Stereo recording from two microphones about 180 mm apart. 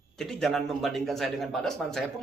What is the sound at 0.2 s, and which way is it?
Speech, centre (ahead or behind).